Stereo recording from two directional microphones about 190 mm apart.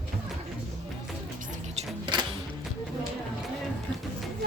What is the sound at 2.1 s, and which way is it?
Music, 25° right (ahead or behind).